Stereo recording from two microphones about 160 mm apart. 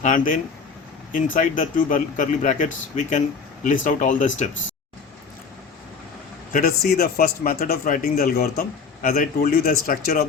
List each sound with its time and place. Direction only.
0.0 s speech: 55° left (ahead or behind)
6.5 s speech: 60° left (ahead or behind)